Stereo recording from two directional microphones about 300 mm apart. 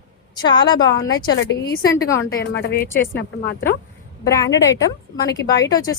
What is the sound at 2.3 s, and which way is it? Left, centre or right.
A woman's voice, left.